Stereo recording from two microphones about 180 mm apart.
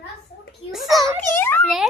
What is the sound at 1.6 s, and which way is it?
Speech, centre (ahead or behind).